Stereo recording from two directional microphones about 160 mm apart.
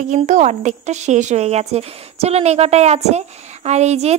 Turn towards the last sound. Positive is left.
turn(degrees=-45)  # may be behind; listen again after turning